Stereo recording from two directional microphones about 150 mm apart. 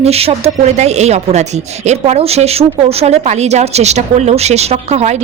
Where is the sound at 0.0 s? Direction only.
40° right (ahead or behind).